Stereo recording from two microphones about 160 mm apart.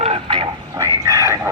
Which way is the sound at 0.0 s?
35° right (ahead or behind).